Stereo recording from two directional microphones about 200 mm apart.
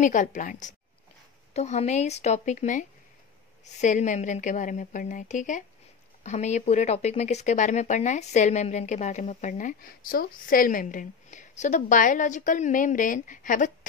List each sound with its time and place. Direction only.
0.0 s speech: 40° left (ahead or behind)